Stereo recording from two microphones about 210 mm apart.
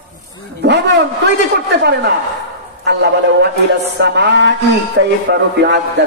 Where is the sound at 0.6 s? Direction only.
55° right (ahead or behind).